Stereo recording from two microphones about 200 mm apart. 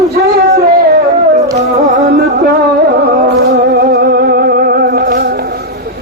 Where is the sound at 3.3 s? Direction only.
55° right (ahead or behind).